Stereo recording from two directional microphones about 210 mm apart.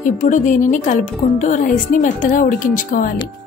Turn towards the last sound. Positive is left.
turn(degrees=40)  # may be behind; listen again after turning